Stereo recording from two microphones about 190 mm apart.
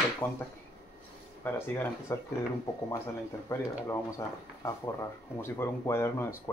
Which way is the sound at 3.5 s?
15° left (ahead or behind).